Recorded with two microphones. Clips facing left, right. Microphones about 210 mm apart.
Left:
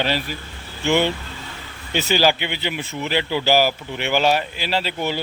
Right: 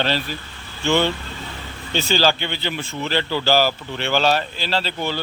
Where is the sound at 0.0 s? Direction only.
10° left (ahead or behind).